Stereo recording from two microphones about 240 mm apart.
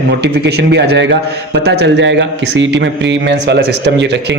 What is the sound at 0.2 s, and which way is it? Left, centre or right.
Speech, right.